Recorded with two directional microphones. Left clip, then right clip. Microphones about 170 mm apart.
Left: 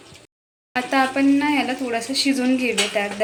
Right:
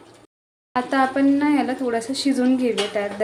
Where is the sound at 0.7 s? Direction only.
25° right (ahead or behind).